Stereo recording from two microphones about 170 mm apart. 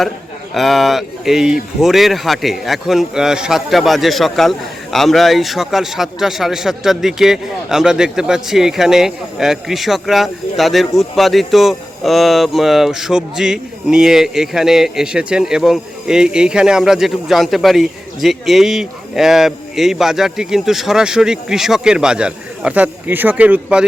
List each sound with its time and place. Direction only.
0.5 s a man's voice: centre (ahead or behind)